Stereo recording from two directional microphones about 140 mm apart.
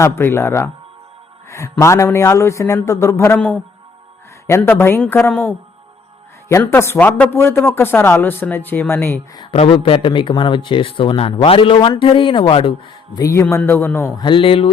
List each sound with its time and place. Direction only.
0.0 s speech: 15° left (ahead or behind)
1.5 s music: 20° left (ahead or behind)
1.8 s a man's voice: 20° left (ahead or behind)
9.3 s speech: 30° left (ahead or behind)
13.1 s speech: 20° left (ahead or behind)
14.2 s speech: 35° left (ahead or behind)